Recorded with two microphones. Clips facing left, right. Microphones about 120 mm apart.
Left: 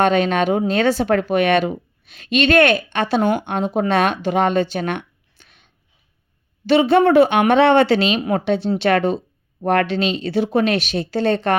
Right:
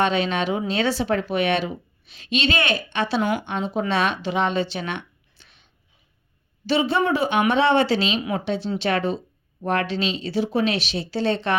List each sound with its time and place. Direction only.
0.0 s speech: 50° left (ahead or behind)